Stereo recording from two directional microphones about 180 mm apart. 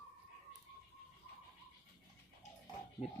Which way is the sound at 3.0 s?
35° left (ahead or behind).